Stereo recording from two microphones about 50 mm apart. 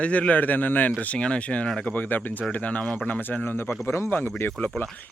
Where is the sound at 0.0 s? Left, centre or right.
Left.